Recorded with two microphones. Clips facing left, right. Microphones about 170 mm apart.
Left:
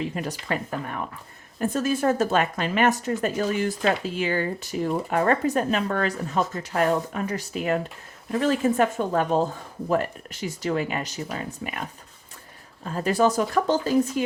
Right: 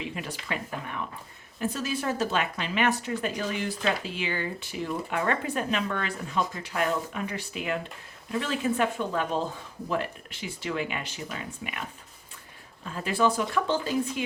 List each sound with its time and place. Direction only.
0.0 s speech: 40° left (ahead or behind)
12.8 s speech: 40° left (ahead or behind)